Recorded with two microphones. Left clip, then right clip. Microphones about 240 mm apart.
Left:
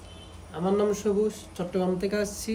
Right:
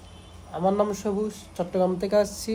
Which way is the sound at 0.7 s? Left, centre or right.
Centre.